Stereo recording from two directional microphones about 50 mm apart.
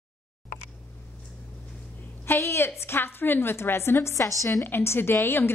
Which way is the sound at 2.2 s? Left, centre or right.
Left.